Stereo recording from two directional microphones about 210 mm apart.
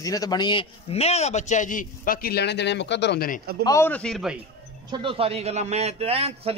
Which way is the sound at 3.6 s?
15° left (ahead or behind).